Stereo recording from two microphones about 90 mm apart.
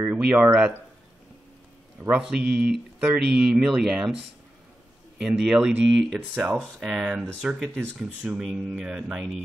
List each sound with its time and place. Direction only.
0.0 s speech: 10° right (ahead or behind)
2.0 s a man's voice: 15° right (ahead or behind)
5.2 s speech: 5° right (ahead or behind)
8.4 s speech: 5° right (ahead or behind)